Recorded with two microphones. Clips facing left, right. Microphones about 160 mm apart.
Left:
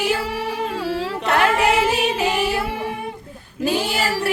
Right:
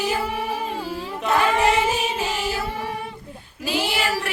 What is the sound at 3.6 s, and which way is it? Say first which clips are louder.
Female singing: left 3 dB; 40° left (ahead or behind).